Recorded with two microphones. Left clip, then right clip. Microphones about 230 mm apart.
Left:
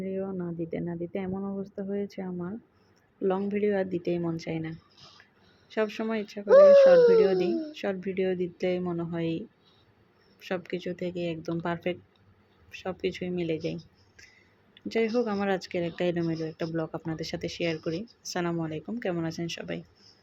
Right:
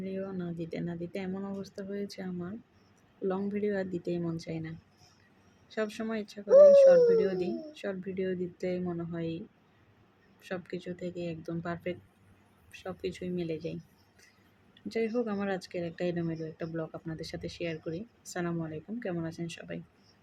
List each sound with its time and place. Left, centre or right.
0.0 s speech: centre
6.5 s speech: left
7.2 s speech: centre
10.4 s speech: centre
14.8 s speech: centre